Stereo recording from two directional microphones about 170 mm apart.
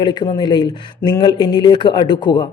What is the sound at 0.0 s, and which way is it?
A man's voice, 25° left (ahead or behind).